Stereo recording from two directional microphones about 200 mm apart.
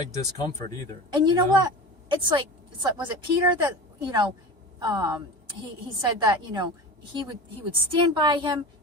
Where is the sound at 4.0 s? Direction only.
20° right (ahead or behind).